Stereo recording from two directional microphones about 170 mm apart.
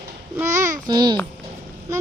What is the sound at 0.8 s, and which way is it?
Speech, 25° right (ahead or behind).